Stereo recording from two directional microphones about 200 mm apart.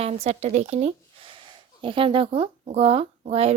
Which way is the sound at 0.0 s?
30° right (ahead or behind).